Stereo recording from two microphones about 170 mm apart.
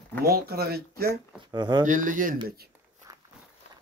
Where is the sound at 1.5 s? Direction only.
25° right (ahead or behind).